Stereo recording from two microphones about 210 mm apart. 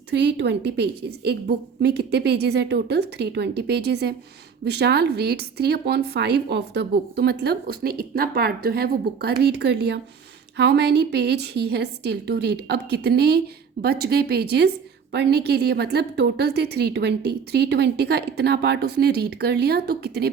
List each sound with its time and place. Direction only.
0.1 s a woman's voice: 55° right (ahead or behind)